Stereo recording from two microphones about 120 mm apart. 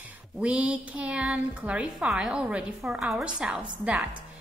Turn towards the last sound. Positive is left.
turn(degrees=-10)  # may be behind; listen again after turning